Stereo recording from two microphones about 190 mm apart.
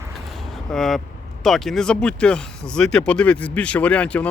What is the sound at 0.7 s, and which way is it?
Speech, centre (ahead or behind).